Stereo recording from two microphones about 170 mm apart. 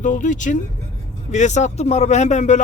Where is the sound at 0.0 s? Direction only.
45° left (ahead or behind).